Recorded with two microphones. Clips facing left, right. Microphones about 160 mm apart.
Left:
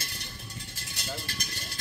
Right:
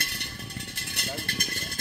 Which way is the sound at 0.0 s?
65° right (ahead or behind).